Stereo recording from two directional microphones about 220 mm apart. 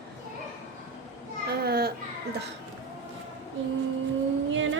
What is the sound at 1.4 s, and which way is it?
Speech, 45° right (ahead or behind).